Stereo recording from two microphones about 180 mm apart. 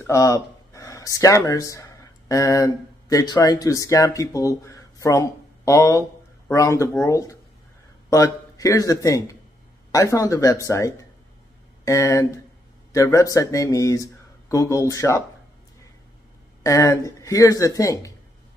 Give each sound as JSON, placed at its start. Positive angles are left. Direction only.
{"t": 0.0, "sound": "a man's voice", "side_deg": 15}
{"t": 16.6, "sound": "speech", "side_deg": 15}